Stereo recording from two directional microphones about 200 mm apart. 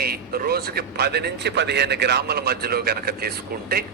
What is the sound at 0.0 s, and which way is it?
A man's voice, 50° right (ahead or behind).